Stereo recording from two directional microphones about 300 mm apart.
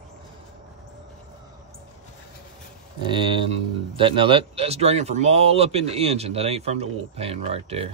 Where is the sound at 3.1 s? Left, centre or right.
Centre.